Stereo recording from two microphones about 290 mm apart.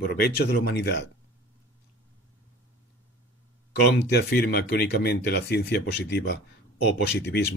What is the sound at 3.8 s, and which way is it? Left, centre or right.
Speech, left.